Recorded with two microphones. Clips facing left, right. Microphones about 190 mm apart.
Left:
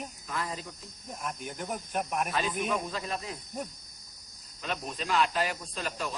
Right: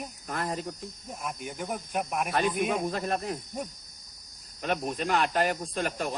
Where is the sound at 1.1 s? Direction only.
5° right (ahead or behind).